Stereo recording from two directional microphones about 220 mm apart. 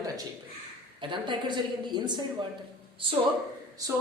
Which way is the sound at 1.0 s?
20° right (ahead or behind).